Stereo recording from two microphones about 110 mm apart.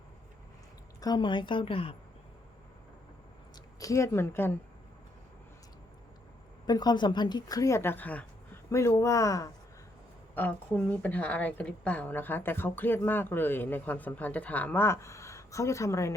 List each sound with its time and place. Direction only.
1.0 s a woman's voice: 45° left (ahead or behind)
3.8 s speech: 30° left (ahead or behind)
6.7 s a woman's voice: 40° left (ahead or behind); by 8.3 s 15° left (ahead or behind)
8.7 s speech: 25° left (ahead or behind)
10.3 s a woman's voice: 15° left (ahead or behind)